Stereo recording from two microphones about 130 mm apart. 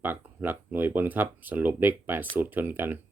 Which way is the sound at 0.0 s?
15° right (ahead or behind).